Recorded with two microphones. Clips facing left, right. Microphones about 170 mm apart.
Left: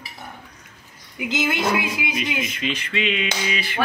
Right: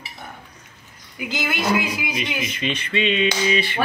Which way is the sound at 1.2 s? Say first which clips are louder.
Left 1 dB; 25° left (ahead or behind).